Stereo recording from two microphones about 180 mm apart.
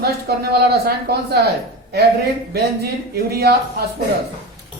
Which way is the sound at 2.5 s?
60° right (ahead or behind).